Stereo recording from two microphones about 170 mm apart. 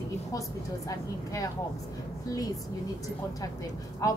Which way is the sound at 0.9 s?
20° left (ahead or behind).